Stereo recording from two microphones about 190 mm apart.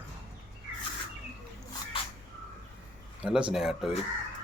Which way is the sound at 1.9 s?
30° left (ahead or behind).